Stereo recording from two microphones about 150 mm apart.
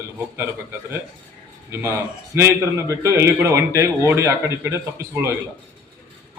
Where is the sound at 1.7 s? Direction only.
15° right (ahead or behind).